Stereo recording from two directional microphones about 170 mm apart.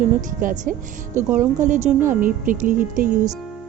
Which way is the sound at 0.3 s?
55° right (ahead or behind).